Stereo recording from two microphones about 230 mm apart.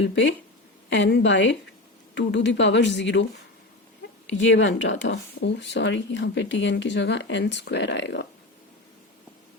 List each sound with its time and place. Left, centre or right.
0.9 s speech: left
4.3 s speech: left